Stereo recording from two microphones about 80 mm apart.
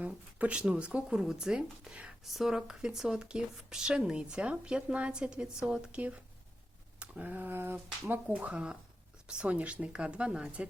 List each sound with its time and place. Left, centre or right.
0.0 s speech: centre